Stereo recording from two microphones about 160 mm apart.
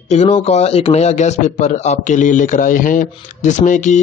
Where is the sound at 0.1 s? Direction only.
40° left (ahead or behind).